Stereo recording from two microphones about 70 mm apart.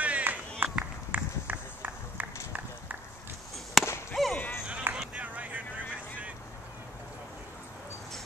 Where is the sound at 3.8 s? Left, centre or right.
Centre.